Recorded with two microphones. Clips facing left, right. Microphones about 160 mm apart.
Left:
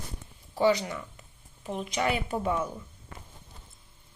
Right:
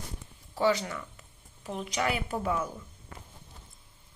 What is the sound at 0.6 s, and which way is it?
Speech, 15° left (ahead or behind).